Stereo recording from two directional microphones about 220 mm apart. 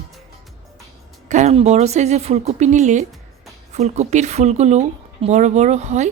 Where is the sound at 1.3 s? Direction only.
30° right (ahead or behind).